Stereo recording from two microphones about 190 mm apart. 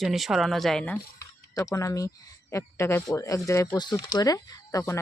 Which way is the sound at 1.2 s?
15° left (ahead or behind).